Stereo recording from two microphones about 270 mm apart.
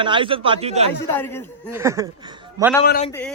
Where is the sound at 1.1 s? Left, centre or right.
Centre.